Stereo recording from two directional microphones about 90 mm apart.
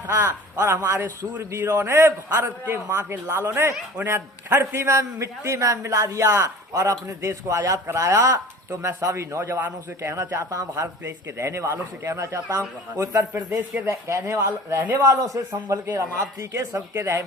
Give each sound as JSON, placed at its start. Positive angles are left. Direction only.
{"t": 0.1, "sound": "a man's voice", "side_deg": -30}
{"t": 1.4, "sound": "a man's voice", "side_deg": -35}
{"t": 13.3, "sound": "speech", "side_deg": -15}
{"t": 13.8, "sound": "a man's voice", "side_deg": -35}